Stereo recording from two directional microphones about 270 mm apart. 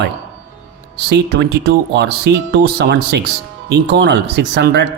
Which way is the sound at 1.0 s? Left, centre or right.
Right.